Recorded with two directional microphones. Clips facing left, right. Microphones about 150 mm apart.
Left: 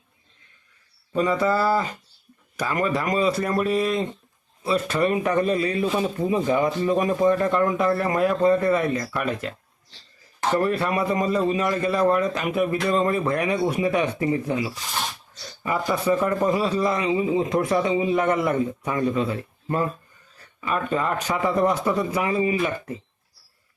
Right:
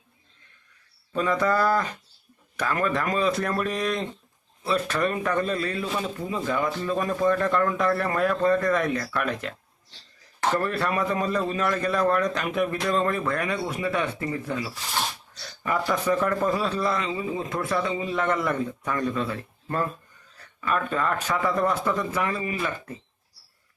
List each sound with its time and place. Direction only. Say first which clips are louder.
1.1 s speech: left 2 dB; 10° left (ahead or behind)
10.5 s speech: left 4 dB; 10° left (ahead or behind)
15.6 s speech: left 2 dB; 5° left (ahead or behind)